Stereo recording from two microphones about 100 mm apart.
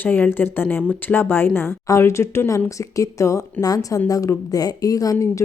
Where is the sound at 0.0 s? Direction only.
20° left (ahead or behind).